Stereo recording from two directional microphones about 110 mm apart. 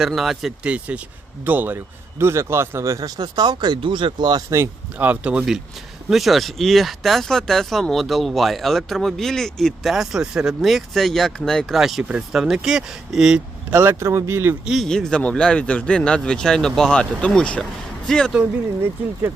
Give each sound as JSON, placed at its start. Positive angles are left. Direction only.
{"t": 0.0, "sound": "speech", "side_deg": 0}
{"t": 0.7, "sound": "speech", "side_deg": -10}
{"t": 4.4, "sound": "speech", "side_deg": -25}
{"t": 6.1, "sound": "speech", "side_deg": 0}
{"t": 13.7, "sound": "speech", "side_deg": -20}
{"t": 14.6, "sound": "speech", "side_deg": -5}
{"t": 14.8, "sound": "speech", "side_deg": 5}